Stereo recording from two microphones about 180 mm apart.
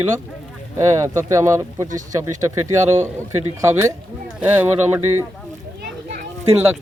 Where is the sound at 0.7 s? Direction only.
15° right (ahead or behind).